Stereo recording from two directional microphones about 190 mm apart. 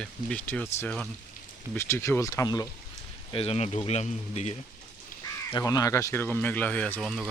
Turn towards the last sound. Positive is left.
turn(degrees=5)  # may be behind; listen again after turning